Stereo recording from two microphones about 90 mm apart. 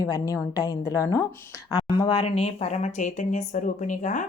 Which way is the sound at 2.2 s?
85° left.